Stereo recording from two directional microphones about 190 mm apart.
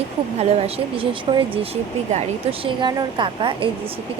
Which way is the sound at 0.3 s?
35° right (ahead or behind).